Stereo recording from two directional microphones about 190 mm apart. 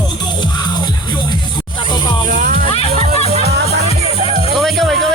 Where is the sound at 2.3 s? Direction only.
45° right (ahead or behind).